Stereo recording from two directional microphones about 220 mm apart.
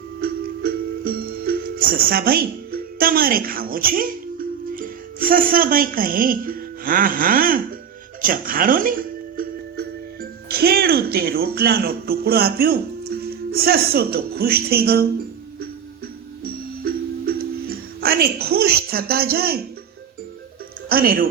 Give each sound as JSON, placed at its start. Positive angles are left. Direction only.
{"t": 0.2, "sound": "music", "side_deg": -40}
{"t": 13.1, "sound": "speech", "side_deg": -45}
{"t": 16.4, "sound": "music", "side_deg": -45}
{"t": 20.9, "sound": "speech", "side_deg": -40}